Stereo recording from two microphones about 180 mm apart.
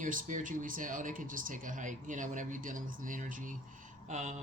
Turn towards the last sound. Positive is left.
turn(degrees=-40)  # may be behind; listen again after turning